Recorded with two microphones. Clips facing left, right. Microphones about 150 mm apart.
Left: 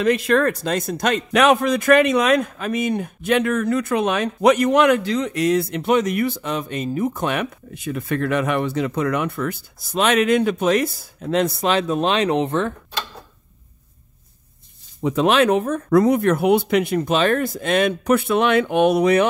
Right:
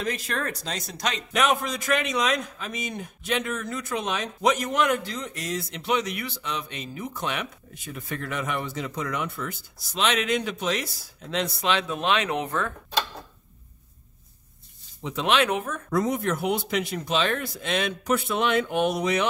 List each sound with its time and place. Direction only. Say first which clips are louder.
0.0 s a man's voice: left 12 dB; 65° left (ahead or behind); by 12.7 s 25° left (ahead or behind)
15.0 s speech: left 7 dB; 50° left (ahead or behind)
15.9 s a man's voice: left 9 dB; 65° left (ahead or behind)